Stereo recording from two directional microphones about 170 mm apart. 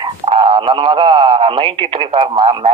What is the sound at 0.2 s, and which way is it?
Speech, 30° right (ahead or behind).